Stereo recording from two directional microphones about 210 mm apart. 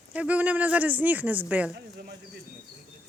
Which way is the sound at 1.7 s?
50° right (ahead or behind).